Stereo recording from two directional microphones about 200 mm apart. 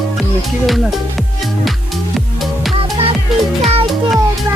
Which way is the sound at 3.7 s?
30° right (ahead or behind).